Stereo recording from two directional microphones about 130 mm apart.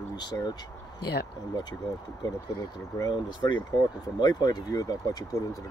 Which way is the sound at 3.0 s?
35° left (ahead or behind).